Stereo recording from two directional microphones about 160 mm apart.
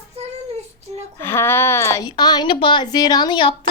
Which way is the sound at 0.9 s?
40° right (ahead or behind).